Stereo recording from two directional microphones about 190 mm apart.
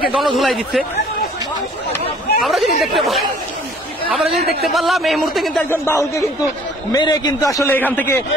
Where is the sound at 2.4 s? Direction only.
Centre (ahead or behind).